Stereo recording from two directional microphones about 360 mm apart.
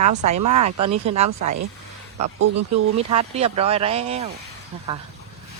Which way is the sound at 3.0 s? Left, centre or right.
Centre.